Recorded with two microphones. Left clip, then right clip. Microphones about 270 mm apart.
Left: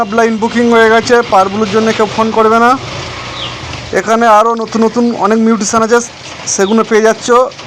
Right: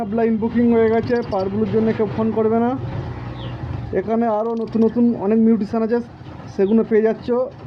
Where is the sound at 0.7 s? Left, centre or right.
Centre.